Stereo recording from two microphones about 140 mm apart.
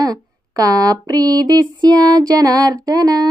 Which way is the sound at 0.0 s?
25° right (ahead or behind).